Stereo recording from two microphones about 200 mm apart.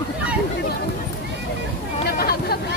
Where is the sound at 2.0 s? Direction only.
50° left (ahead or behind).